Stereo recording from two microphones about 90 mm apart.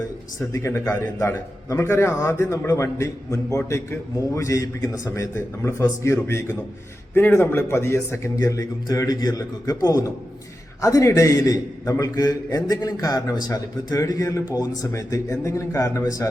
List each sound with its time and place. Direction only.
0.5 s a man's voice: 30° left (ahead or behind)